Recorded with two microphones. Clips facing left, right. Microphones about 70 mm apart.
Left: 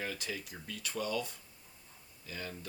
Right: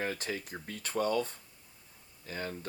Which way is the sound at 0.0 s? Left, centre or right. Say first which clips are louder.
Right 4 dB; right.